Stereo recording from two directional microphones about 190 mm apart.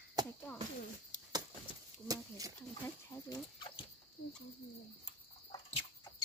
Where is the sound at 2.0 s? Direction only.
20° right (ahead or behind).